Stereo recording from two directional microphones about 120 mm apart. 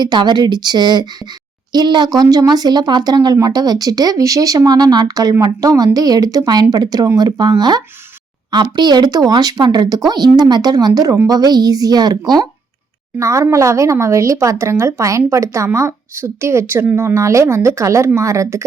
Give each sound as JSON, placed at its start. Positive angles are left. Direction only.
{"t": 0.0, "sound": "speech", "side_deg": -40}